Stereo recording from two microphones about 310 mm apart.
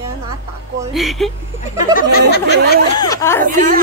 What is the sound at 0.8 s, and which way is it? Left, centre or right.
Speech, centre.